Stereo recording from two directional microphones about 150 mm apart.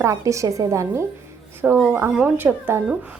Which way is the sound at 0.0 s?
20° right (ahead or behind).